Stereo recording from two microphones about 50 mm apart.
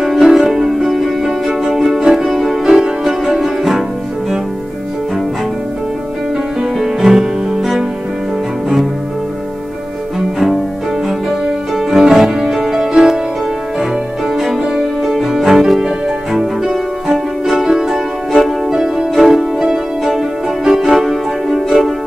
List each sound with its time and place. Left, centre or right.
0.0 s music: centre
6.8 s music: centre
11.1 s music: centre
14.3 s music: centre
17.5 s music: centre